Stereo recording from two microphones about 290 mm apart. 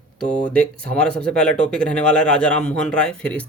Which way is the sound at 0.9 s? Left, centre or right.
Centre.